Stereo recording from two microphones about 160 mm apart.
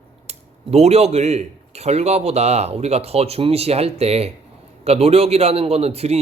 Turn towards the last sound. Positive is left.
turn(degrees=-40)  # may be behind; listen again after turning